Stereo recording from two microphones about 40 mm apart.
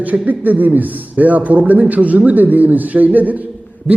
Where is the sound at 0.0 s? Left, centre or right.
Right.